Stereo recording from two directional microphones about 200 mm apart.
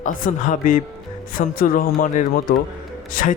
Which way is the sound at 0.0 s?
40° left (ahead or behind).